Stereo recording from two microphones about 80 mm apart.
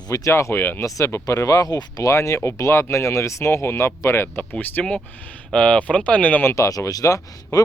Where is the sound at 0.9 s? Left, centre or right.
Left.